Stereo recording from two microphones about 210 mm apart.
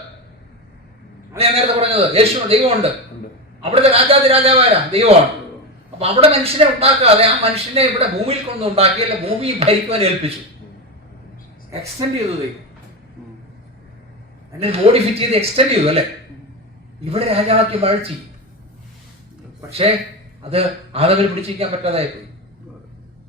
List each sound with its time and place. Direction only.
1.4 s a man's voice: 30° right (ahead or behind)
14.6 s a man's voice: 30° right (ahead or behind)
20.4 s a man's voice: 30° right (ahead or behind)